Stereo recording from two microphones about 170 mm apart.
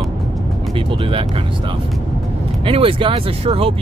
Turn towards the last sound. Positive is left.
turn(degrees=-35)  # may be behind; listen again after turning